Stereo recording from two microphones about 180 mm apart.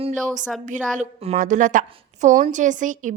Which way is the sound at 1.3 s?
45° right (ahead or behind).